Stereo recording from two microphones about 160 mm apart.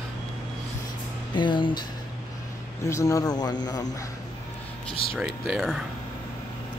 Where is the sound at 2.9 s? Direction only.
20° left (ahead or behind).